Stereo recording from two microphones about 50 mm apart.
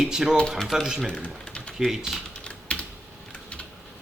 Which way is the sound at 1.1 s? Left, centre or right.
Left.